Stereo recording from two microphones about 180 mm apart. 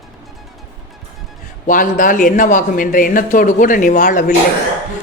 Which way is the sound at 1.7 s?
50° left (ahead or behind).